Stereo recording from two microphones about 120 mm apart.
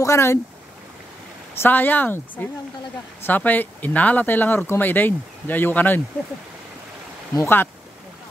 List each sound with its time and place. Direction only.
0.0 s speech: 25° left (ahead or behind)
1.6 s speech: 15° left (ahead or behind)
7.3 s speech: 20° left (ahead or behind)